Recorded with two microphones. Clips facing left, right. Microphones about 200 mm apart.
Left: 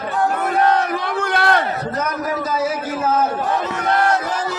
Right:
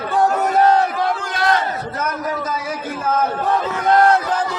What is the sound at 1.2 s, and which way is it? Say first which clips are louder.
Crowd: left 4 dB; 60° left (ahead or behind).